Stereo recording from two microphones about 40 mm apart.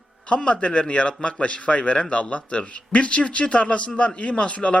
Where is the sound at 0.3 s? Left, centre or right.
Left.